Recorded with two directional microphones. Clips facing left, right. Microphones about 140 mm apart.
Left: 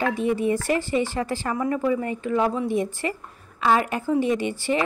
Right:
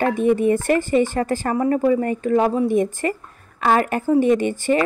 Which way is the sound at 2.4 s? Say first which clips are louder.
Right 5 dB; 30° right (ahead or behind).